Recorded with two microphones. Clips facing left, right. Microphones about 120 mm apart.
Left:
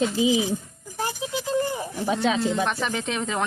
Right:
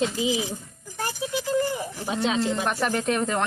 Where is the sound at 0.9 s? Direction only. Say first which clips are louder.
Even; 20° left (ahead or behind).